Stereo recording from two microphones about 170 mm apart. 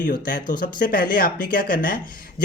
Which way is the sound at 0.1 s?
55° left (ahead or behind).